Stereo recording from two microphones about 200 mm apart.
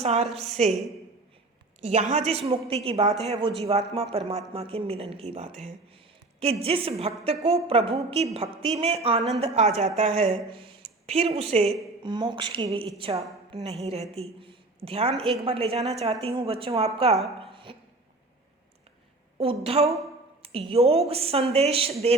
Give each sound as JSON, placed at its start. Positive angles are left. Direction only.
{"t": 0.0, "sound": "a woman's voice", "side_deg": -30}
{"t": 1.8, "sound": "a woman's voice", "side_deg": -35}
{"t": 17.4, "sound": "a sound", "side_deg": -25}
{"t": 19.4, "sound": "a woman's voice", "side_deg": -30}